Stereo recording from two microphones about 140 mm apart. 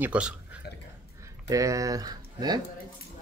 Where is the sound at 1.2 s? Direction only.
25° right (ahead or behind).